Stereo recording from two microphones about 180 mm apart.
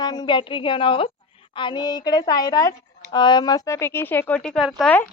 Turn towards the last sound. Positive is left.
turn(degrees=5)  # may be behind; listen again after turning